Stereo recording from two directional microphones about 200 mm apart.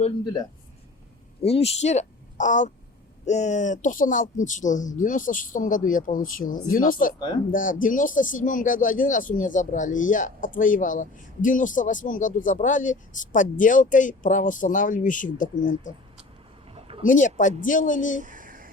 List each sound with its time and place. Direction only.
1.4 s a woman's voice: 30° left (ahead or behind)
17.1 s speech: 40° left (ahead or behind)
18.2 s a sound: 40° right (ahead or behind)